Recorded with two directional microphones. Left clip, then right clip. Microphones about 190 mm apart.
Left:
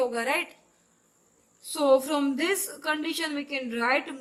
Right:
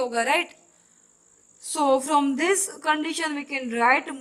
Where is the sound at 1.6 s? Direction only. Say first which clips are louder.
Even; 40° right (ahead or behind).